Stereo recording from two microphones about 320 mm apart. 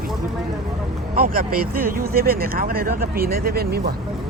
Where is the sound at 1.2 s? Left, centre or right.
Right.